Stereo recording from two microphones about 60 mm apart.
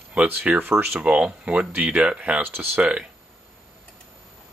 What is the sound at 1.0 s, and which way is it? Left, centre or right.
Speech, right.